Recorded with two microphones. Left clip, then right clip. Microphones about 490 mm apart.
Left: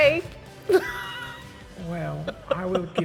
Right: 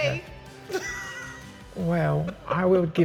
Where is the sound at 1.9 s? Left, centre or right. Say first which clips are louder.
Right 5 dB; right.